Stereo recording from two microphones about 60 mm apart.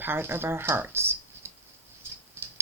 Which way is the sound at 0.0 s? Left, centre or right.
Right.